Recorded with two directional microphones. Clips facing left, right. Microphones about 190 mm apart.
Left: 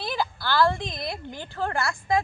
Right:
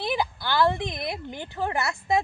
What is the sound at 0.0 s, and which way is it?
Speech, 20° right (ahead or behind).